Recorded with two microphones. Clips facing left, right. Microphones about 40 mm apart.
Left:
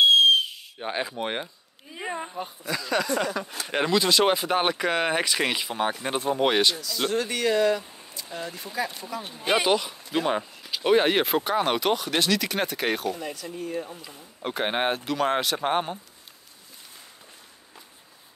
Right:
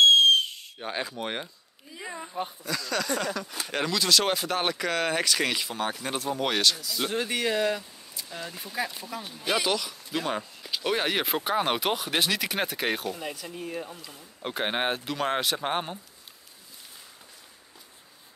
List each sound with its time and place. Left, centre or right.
0.0 s a sound: centre
1.9 s a sound: left
2.7 s speech: centre
6.8 s speech: centre
8.3 s speech: centre
9.3 s speech: left
11.2 s speech: centre
13.9 s speech: centre